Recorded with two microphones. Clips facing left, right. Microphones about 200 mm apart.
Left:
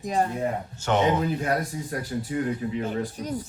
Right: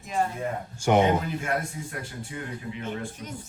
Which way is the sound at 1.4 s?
40° left (ahead or behind).